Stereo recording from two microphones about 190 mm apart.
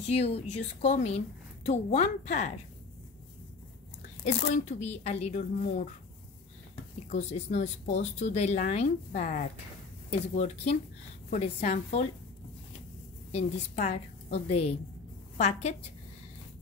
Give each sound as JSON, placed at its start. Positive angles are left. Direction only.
{"t": 0.0, "sound": "speech", "side_deg": 35}
{"t": 4.2, "sound": "speech", "side_deg": 35}
{"t": 7.1, "sound": "speech", "side_deg": 35}
{"t": 13.3, "sound": "a woman's voice", "side_deg": 35}